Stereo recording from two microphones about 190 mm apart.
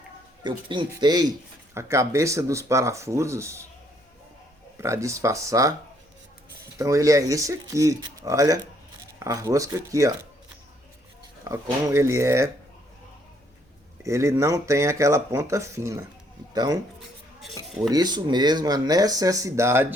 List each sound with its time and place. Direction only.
0.4 s speech: 25° right (ahead or behind)
4.8 s speech: 15° right (ahead or behind)
6.7 s speech: 15° right (ahead or behind)
11.4 s speech: 15° right (ahead or behind)
14.0 s speech: 15° right (ahead or behind)
17.8 s speech: 20° right (ahead or behind)